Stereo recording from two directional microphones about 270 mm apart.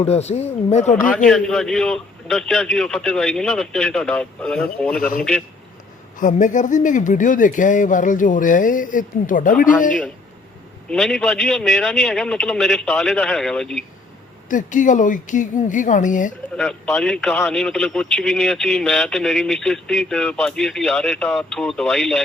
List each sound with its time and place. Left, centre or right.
0.0 s speech: left
1.3 s a man's voice: centre
6.1 s speech: left
10.8 s a man's voice: centre
14.5 s speech: left
16.6 s a man's voice: centre